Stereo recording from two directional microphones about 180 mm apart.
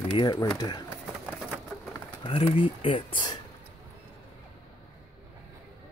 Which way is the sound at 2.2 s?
30° left (ahead or behind).